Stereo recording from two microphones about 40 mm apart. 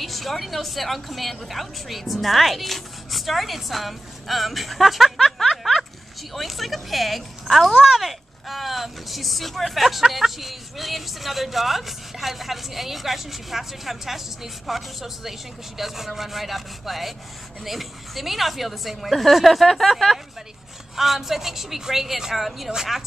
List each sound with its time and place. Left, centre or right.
0.0 s a woman's voice: centre